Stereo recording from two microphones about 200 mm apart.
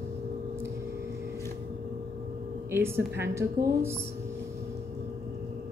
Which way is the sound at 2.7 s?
10° right (ahead or behind).